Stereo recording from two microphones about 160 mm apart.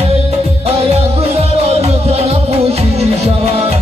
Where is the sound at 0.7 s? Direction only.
40° right (ahead or behind).